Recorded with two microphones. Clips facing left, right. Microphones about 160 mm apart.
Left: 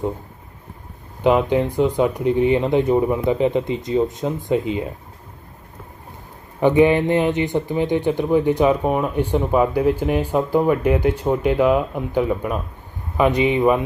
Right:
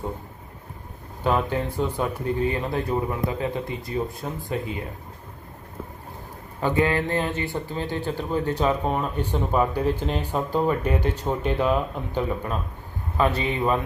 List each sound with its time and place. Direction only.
1.2 s a man's voice: 15° left (ahead or behind)
6.6 s a man's voice: 20° left (ahead or behind)